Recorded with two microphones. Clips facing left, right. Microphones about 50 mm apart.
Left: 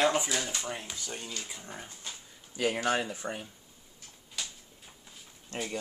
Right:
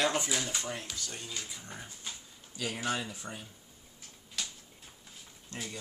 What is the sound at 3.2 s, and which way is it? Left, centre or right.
Speech, left.